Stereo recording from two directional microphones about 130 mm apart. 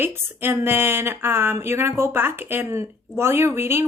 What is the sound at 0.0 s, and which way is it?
Speech, 15° right (ahead or behind).